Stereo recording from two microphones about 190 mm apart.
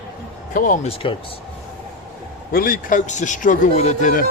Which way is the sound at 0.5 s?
45° left (ahead or behind).